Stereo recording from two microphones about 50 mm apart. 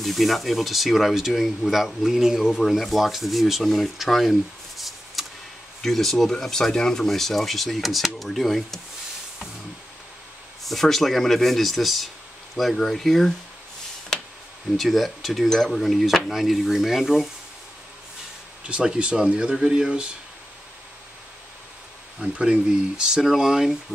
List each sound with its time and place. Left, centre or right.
0.0 s speech: centre
10.6 s speech: centre
14.1 s a sound: centre
14.8 s speech: centre
18.7 s speech: right
22.2 s speech: centre